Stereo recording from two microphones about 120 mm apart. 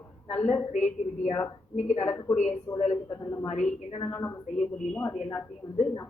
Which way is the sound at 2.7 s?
30° left (ahead or behind).